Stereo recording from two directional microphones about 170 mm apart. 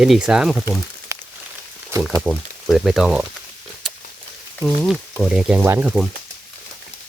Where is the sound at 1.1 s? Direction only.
15° right (ahead or behind).